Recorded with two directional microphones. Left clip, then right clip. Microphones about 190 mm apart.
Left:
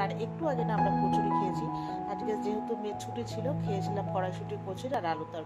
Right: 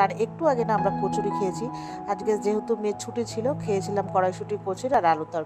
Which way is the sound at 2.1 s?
40° right (ahead or behind).